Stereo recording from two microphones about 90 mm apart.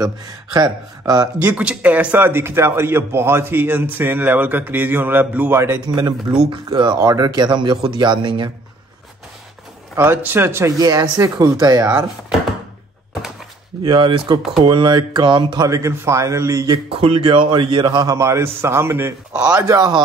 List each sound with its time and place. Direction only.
0.0 s speech: 45° right (ahead or behind)
1.4 s speech: 15° right (ahead or behind)
2.2 s a man's voice: 25° right (ahead or behind)
5.9 s speech: 55° right (ahead or behind)
9.9 s a man's voice: 20° right (ahead or behind)
10.8 s speech: 45° right (ahead or behind)
13.8 s speech: 65° right (ahead or behind)
15.7 s a man's voice: 30° right (ahead or behind)
16.9 s speech: 75° right (ahead or behind); by 18.1 s 55° right (ahead or behind)
18.1 s a man's voice: 35° right (ahead or behind)
19.5 s speech: 45° right (ahead or behind)